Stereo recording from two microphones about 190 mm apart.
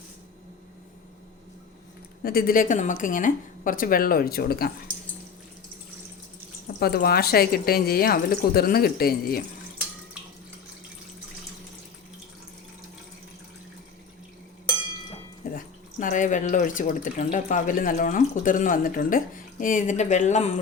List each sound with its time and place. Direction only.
2.2 s speech: 50° left (ahead or behind)
6.7 s speech: 55° left (ahead or behind)
15.5 s speech: 45° left (ahead or behind)